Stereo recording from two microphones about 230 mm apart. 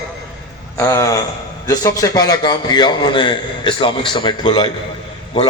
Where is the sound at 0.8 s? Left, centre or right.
Centre.